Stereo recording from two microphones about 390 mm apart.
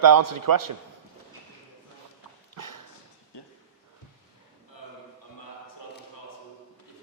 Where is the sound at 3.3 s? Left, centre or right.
Left.